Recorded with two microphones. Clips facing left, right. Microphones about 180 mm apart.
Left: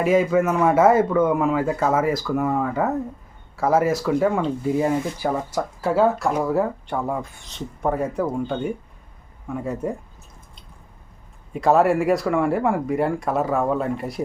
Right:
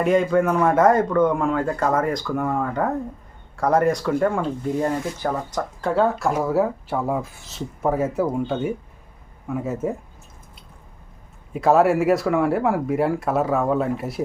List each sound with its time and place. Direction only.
0.0 s speech: 5° left (ahead or behind)
11.5 s speech: centre (ahead or behind)